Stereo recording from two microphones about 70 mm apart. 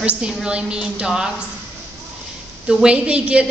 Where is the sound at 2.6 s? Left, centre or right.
Centre.